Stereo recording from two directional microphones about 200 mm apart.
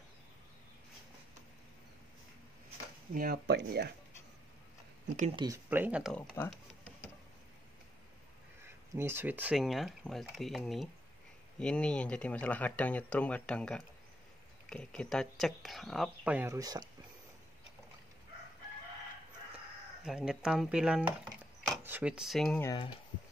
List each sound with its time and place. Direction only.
3.1 s speech: 45° right (ahead or behind)
5.3 s speech: 20° right (ahead or behind)
5.7 s speech: 10° right (ahead or behind)
6.1 s speech: 15° left (ahead or behind)
6.5 s a sound: 5° left (ahead or behind)
8.9 s speech: 10° right (ahead or behind)
20.1 s chopping: 5° right (ahead or behind)
22.6 s speech: 15° left (ahead or behind)